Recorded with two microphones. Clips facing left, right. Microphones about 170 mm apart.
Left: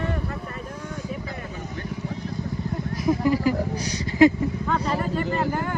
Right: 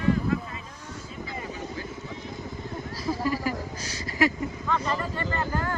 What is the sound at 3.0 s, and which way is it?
Speech, 20° left (ahead or behind).